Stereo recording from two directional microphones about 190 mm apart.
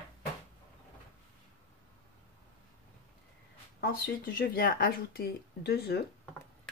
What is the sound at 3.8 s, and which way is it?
Speech, 50° left (ahead or behind).